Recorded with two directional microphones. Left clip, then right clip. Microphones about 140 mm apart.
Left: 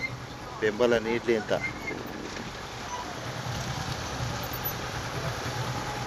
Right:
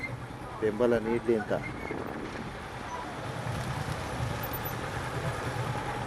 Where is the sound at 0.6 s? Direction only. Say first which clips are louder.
Left 2 dB; 5° left (ahead or behind).